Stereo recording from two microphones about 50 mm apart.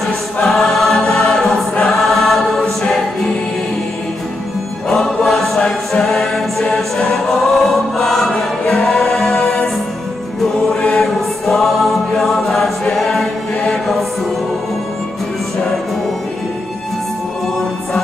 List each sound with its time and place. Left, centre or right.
0.5 s choir: centre
1.1 s a capella: centre
1.9 s choir: centre
4.8 s music: centre
5.9 s a capella: centre
11.0 s choir: centre